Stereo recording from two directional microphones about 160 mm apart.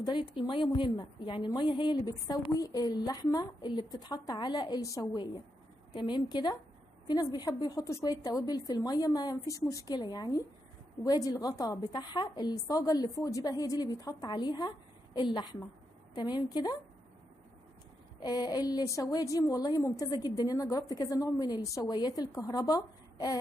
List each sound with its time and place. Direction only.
0.0 s a woman's voice: 30° left (ahead or behind)
18.2 s a woman's voice: 25° left (ahead or behind)